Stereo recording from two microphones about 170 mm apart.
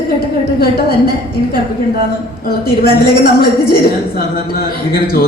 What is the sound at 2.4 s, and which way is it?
A man's voice, 60° left (ahead or behind).